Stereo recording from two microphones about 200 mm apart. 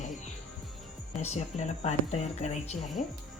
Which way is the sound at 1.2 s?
35° left (ahead or behind).